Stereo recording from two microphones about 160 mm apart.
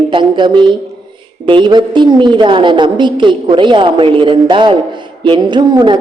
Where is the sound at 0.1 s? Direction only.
30° right (ahead or behind).